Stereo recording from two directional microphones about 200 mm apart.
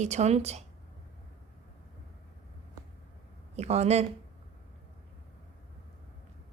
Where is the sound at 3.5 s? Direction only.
30° right (ahead or behind).